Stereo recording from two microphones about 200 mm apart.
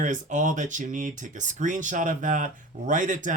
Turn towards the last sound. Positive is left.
turn(degrees=-40)  # may be behind; listen again after turning